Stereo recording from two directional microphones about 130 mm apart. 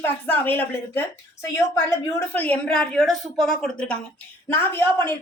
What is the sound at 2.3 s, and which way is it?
Speech, 15° left (ahead or behind).